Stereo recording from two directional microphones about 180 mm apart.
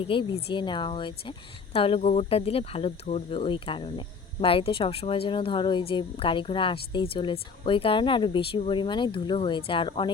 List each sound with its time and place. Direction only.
0.0 s a woman's voice: 30° left (ahead or behind)